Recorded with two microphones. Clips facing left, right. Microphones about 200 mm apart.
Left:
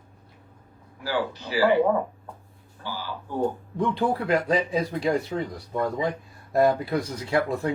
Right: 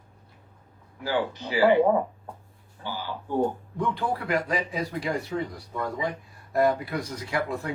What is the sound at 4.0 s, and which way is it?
Speech, 25° left (ahead or behind).